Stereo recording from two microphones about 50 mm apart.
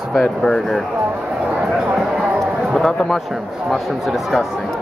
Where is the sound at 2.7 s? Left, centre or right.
Centre.